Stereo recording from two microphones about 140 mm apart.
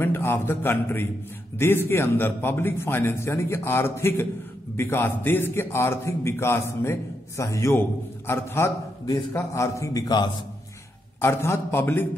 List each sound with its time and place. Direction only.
0.0 s a man's voice: 15° left (ahead or behind)
11.1 s a man's voice: 20° left (ahead or behind)